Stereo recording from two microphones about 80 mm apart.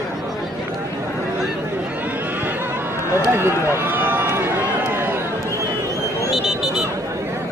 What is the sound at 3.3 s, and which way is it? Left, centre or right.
Run, right.